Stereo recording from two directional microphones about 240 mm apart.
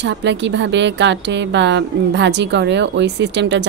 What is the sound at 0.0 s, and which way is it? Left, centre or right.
A woman's voice, right.